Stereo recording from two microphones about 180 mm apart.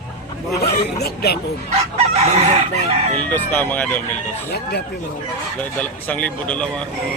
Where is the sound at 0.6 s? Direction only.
60° left (ahead or behind).